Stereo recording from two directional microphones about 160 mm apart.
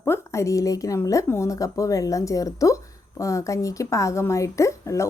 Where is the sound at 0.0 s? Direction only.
15° left (ahead or behind).